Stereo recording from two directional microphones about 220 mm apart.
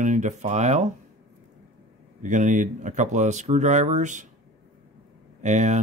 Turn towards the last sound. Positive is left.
turn(degrees=-30)  # may be behind; listen again after turning